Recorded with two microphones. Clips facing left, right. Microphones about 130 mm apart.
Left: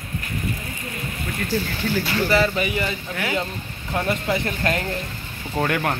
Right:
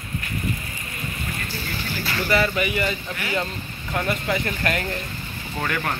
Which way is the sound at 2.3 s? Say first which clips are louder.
Even; 25° left (ahead or behind).